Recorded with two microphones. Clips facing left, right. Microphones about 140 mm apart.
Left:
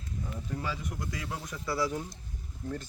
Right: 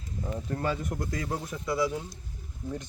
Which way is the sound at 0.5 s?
55° right (ahead or behind).